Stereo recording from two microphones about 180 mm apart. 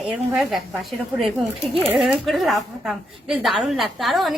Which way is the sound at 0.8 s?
Centre (ahead or behind).